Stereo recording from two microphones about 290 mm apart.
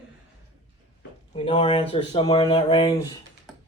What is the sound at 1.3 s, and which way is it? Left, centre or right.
A man's voice, centre.